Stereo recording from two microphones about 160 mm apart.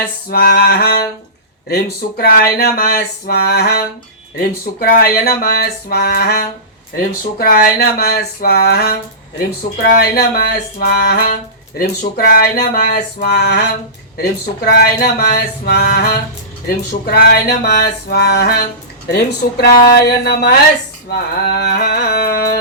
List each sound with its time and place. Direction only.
0.3 s a sound: 70° left (ahead or behind)
4.4 s a sound: 65° left (ahead or behind); by 13.6 s 90° left
14.2 s speech: 85° left
16.9 s music: 85° left
19.1 s speech: 75° left (ahead or behind)
21.6 s speech: 90° left